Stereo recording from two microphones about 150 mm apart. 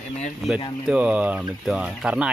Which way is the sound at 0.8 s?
5° right (ahead or behind).